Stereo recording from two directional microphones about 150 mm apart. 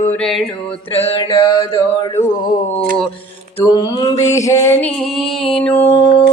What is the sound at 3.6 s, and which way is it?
Music, 30° left (ahead or behind).